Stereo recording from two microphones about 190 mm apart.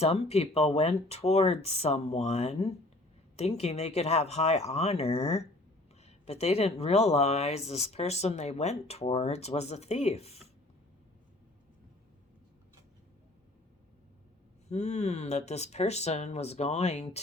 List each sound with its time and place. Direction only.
0.0 s speech: 35° left (ahead or behind)
14.7 s speech: 35° left (ahead or behind)